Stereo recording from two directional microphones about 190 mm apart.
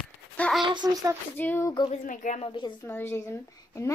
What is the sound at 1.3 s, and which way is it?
Speech, 10° left (ahead or behind).